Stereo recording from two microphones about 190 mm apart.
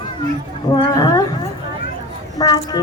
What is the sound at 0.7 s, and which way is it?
Speech, 20° left (ahead or behind).